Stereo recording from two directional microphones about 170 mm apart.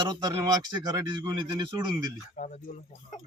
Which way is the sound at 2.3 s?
50° left (ahead or behind).